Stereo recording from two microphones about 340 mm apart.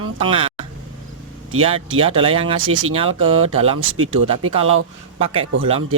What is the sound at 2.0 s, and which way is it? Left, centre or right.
Speech, centre.